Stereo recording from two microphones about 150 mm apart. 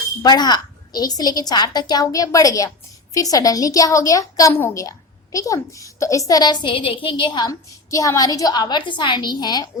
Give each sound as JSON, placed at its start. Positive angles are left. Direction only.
{"t": 0.2, "sound": "a child's voice", "side_deg": 30}